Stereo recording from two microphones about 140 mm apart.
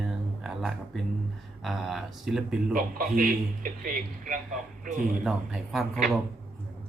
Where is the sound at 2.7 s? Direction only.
75° right (ahead or behind).